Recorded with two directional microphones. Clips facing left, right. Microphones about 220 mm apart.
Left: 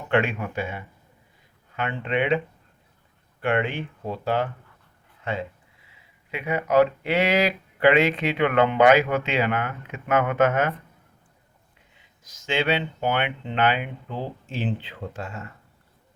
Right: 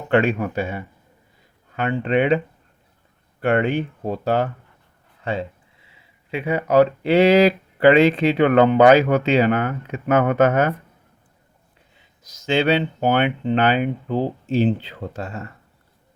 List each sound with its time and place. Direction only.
0.1 s speech: 35° right (ahead or behind)
3.4 s speech: 40° right (ahead or behind)
5.2 s speech: 30° right (ahead or behind)
12.2 s speech: 40° right (ahead or behind)